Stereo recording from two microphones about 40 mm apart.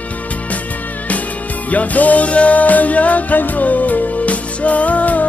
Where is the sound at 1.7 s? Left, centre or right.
Left.